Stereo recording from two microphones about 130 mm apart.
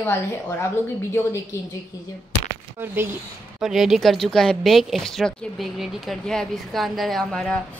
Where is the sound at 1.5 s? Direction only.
20° left (ahead or behind).